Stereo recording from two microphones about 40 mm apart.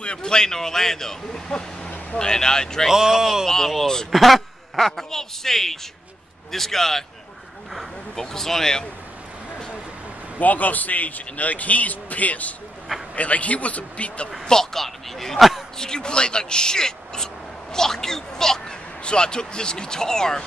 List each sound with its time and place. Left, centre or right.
0.0 s speech: left
2.9 s speech: centre
3.4 s speech: centre
4.1 s speech: centre
8.2 s speech: centre
10.4 s a man's voice: left
14.4 s speech: centre
15.8 s speech: centre